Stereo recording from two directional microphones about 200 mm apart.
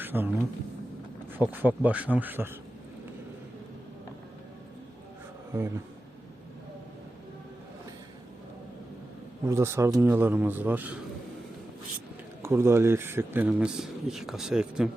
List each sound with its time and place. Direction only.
0.0 s a sound: 10° right (ahead or behind)
1.3 s speech: 10° right (ahead or behind)
5.5 s speech: 15° right (ahead or behind)
9.5 s speech: 15° right (ahead or behind)
12.4 s speech: 10° right (ahead or behind)